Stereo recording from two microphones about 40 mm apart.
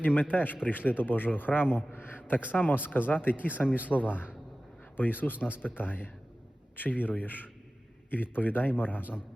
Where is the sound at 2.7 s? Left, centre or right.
Left.